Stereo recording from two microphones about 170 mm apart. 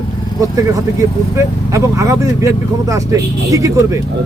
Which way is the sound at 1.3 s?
20° right (ahead or behind).